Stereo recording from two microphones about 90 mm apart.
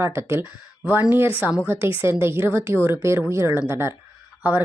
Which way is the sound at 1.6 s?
25° right (ahead or behind).